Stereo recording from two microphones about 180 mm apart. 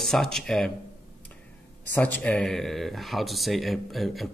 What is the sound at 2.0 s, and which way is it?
A man's voice, 10° left (ahead or behind).